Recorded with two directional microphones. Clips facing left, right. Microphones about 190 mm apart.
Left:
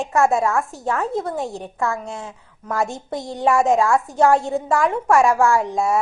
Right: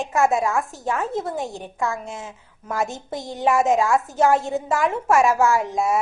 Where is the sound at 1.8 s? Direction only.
15° right (ahead or behind).